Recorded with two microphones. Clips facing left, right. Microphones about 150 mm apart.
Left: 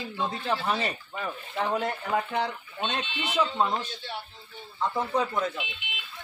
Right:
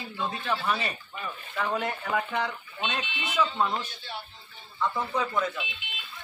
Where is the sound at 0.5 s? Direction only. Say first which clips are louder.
Left 1 dB; 35° left (ahead or behind).